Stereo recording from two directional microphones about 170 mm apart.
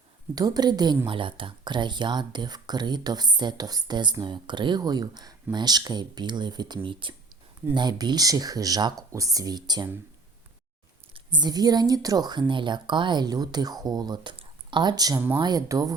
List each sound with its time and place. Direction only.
0.3 s speech: 25° right (ahead or behind)
11.1 s speech: 25° right (ahead or behind)